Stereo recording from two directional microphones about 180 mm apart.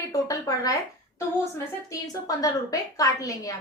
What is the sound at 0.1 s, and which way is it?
A woman's voice, 20° left (ahead or behind).